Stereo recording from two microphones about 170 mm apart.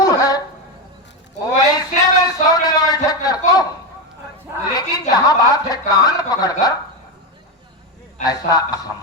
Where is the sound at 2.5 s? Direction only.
25° left (ahead or behind).